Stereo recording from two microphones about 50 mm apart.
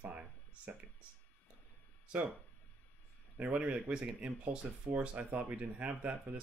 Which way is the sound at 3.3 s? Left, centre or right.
Right.